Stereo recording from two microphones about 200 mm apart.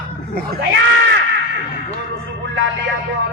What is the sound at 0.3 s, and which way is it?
Speech, 55° right (ahead or behind).